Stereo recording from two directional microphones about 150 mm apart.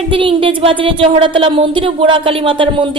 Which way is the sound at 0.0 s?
35° right (ahead or behind).